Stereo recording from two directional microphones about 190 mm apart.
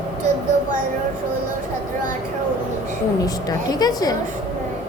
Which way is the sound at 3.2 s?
20° left (ahead or behind).